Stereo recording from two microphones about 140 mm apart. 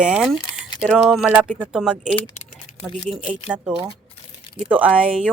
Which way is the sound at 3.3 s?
10° right (ahead or behind).